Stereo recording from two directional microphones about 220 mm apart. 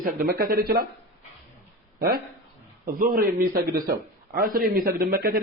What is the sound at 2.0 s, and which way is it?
A man's voice, 45° right (ahead or behind).